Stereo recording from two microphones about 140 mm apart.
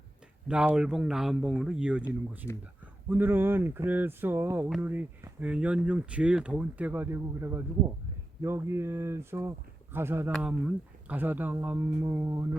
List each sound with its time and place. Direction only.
0.4 s speech: 5° right (ahead or behind)
3.1 s speech: 15° right (ahead or behind)